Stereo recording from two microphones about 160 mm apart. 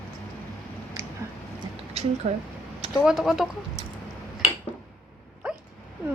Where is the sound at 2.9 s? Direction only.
5° right (ahead or behind).